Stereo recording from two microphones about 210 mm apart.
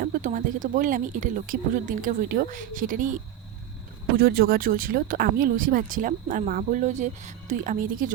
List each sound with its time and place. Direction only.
0.0 s speech: 40° right (ahead or behind)
4.2 s speech: 45° right (ahead or behind)